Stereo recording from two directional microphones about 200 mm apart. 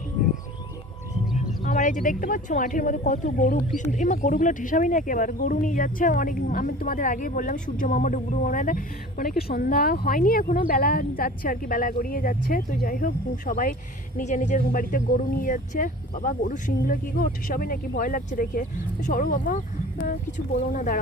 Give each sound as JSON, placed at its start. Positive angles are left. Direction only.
{"t": 1.4, "sound": "speech", "side_deg": 35}